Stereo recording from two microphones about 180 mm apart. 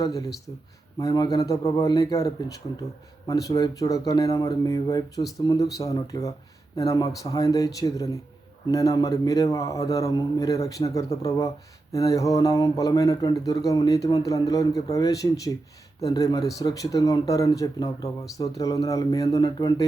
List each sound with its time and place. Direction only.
0.0 s a man's voice: 20° left (ahead or behind)